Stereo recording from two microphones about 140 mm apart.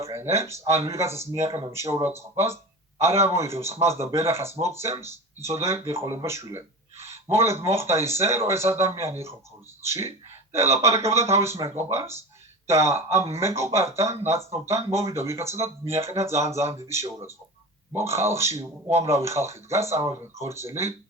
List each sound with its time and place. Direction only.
0.0 s speech: 20° right (ahead or behind)